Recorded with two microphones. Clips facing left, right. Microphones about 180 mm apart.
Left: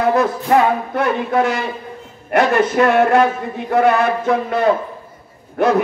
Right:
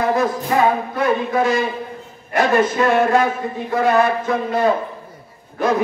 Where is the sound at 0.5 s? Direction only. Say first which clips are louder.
Left 4 dB; 60° left (ahead or behind).